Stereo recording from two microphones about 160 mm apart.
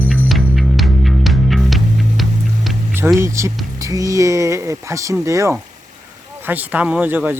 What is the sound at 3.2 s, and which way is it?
Speech, 20° right (ahead or behind).